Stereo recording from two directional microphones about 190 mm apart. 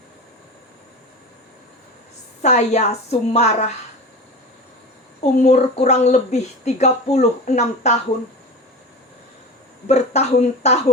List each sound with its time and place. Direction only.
2.4 s speech: 35° left (ahead or behind)
5.4 s speech: 35° left (ahead or behind)
9.8 s speech: 35° left (ahead or behind)